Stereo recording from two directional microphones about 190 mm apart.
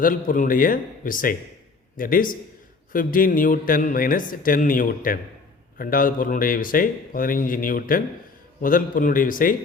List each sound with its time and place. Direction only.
0.0 s speech: 45° left (ahead or behind)